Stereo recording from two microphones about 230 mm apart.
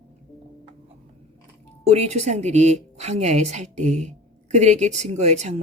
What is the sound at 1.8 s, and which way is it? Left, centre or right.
A woman's voice, right.